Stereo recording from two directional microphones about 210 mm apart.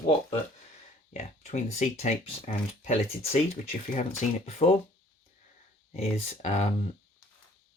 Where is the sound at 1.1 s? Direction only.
30° left (ahead or behind).